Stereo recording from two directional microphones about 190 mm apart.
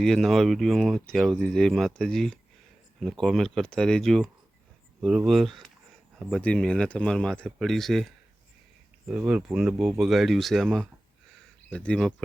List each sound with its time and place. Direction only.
0.0 s speech: centre (ahead or behind)